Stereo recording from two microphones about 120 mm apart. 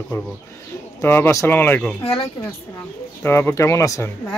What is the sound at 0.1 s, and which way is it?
Speech, 25° left (ahead or behind).